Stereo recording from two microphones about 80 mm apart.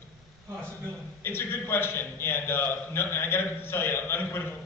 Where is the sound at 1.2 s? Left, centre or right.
Left.